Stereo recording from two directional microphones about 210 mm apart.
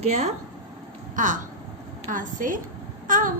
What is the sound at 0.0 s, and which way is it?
A woman's voice, 30° right (ahead or behind).